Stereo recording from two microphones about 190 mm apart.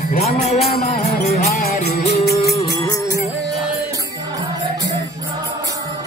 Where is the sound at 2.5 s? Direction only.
25° left (ahead or behind).